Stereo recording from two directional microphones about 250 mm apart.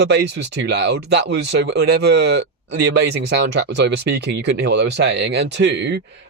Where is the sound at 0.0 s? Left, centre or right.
Right.